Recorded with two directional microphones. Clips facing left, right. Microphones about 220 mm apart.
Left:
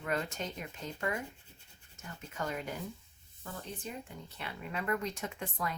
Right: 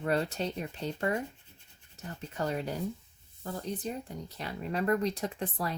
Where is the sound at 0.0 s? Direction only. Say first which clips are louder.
Right 6 dB; 35° right (ahead or behind).